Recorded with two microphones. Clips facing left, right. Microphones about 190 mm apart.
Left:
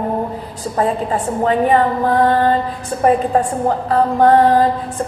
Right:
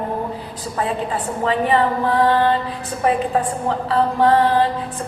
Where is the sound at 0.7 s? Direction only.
45° left (ahead or behind).